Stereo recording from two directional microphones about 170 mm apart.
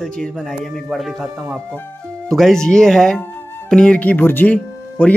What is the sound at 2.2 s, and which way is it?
A man's voice, centre (ahead or behind).